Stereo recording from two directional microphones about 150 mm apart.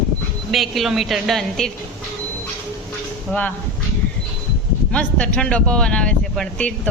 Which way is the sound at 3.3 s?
10° left (ahead or behind).